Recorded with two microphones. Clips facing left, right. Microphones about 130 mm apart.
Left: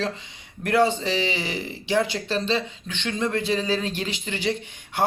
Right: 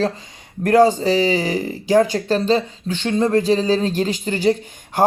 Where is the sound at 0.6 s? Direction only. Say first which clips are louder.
Right 7 dB; 40° right (ahead or behind).